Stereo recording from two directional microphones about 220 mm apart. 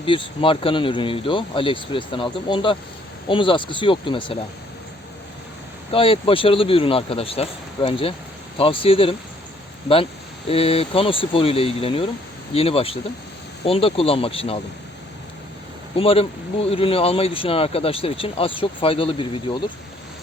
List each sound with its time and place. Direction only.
0.0 s speech: 25° left (ahead or behind)
5.9 s speech: 25° left (ahead or behind)
10.5 s speech: 25° left (ahead or behind)
16.0 s speech: 25° left (ahead or behind)